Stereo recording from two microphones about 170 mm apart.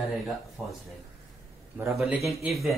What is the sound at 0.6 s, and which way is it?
Speech, 10° right (ahead or behind).